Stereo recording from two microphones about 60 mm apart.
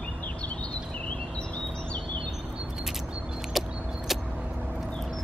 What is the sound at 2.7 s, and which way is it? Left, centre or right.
Vehicle, centre.